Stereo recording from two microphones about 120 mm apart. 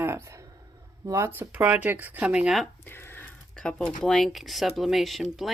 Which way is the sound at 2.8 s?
20° left (ahead or behind).